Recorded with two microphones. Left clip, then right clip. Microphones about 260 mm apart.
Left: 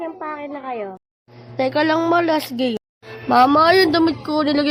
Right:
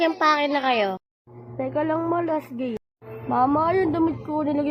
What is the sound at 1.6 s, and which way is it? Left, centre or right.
Speech, left.